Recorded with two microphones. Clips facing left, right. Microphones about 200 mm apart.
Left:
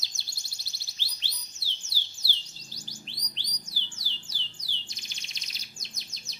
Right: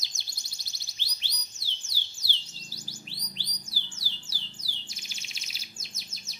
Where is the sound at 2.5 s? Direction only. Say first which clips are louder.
Right 2 dB; 15° left (ahead or behind).